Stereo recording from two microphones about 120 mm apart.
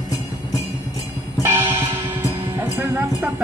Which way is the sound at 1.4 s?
20° right (ahead or behind).